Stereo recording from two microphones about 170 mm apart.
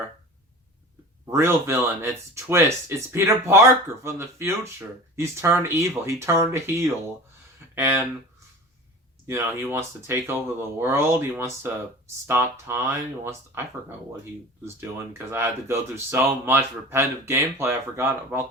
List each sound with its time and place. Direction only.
1.3 s speech: 15° right (ahead or behind)
9.2 s speech: 15° right (ahead or behind)